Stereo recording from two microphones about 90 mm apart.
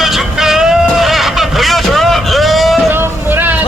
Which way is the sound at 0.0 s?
5° right (ahead or behind).